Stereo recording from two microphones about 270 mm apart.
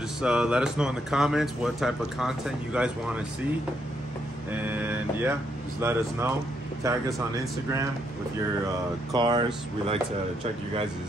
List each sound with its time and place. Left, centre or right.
0.2 s speech: centre
4.5 s speech: centre
9.1 s speech: centre